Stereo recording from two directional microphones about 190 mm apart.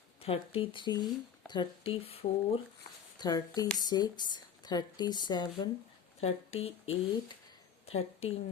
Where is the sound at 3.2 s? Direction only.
20° left (ahead or behind).